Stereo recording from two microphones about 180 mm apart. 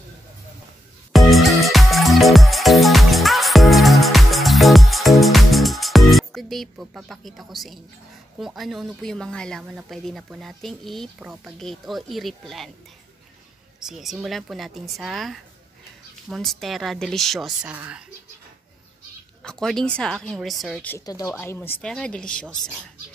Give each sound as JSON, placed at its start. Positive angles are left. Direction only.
{"t": 1.3, "sound": "music", "side_deg": 0}
{"t": 8.4, "sound": "speech", "side_deg": 0}
{"t": 13.8, "sound": "speech", "side_deg": -5}
{"t": 19.4, "sound": "speech", "side_deg": 5}
{"t": 20.9, "sound": "speech", "side_deg": 20}